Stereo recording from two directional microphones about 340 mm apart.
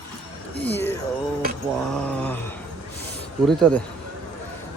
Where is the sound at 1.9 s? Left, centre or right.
Centre.